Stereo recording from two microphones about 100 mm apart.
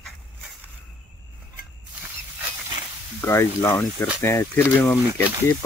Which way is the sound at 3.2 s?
25° left (ahead or behind).